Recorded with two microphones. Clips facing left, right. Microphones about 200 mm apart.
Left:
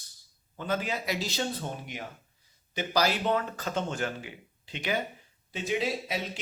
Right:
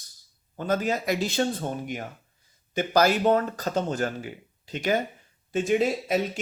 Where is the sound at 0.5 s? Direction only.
40° right (ahead or behind).